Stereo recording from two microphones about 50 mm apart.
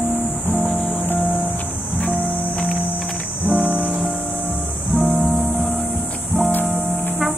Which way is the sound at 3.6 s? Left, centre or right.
Right.